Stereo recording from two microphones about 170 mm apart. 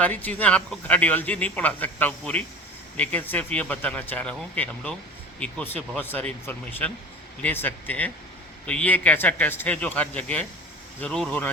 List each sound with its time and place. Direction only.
0.0 s a man's voice: 10° left (ahead or behind)